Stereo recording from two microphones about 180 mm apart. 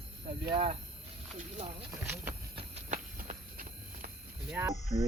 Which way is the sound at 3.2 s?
50° right (ahead or behind).